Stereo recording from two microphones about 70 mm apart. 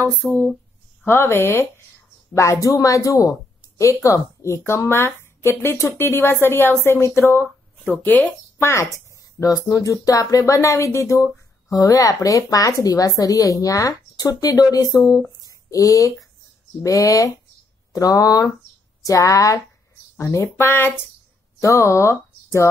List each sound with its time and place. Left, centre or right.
0.2 s speech: centre
1.0 s speech: left
2.3 s speech: left
8.0 s speech: left
8.5 s speech: left
9.4 s speech: left
11.7 s speech: left
15.7 s speech: left
19.0 s speech: left
20.5 s speech: left
21.5 s speech: left